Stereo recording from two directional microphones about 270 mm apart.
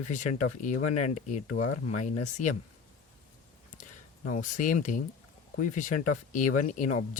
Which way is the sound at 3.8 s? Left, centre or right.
Left.